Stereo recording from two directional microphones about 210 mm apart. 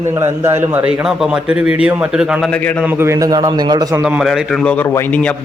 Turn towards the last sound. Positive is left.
turn(degrees=5)  # may be behind; listen again after turning